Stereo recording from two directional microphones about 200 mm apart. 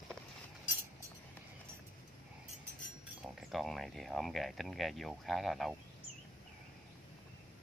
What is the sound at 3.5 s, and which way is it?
Speech, centre (ahead or behind).